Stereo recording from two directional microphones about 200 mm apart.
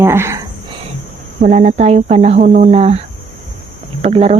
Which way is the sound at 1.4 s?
35° right (ahead or behind).